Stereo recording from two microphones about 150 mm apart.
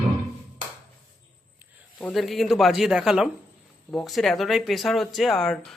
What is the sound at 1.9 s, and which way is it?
Speech, 5° left (ahead or behind).